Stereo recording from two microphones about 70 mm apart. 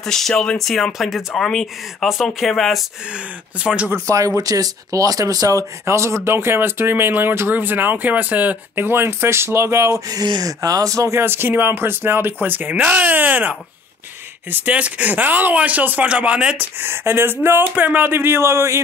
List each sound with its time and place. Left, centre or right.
0.0 s speech: centre
3.1 s speech: centre
4.4 s speech: right
10.0 s speech: right
11.1 s speech: right; by 16.6 s centre
16.8 s speech: right